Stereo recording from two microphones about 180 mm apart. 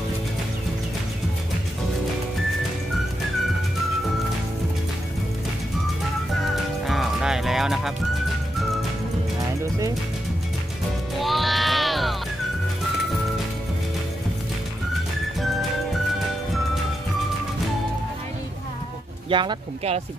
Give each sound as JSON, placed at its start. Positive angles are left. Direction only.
{"t": 6.5, "sound": "music", "side_deg": 0}
{"t": 11.1, "sound": "music", "side_deg": 0}
{"t": 19.2, "sound": "speech", "side_deg": -25}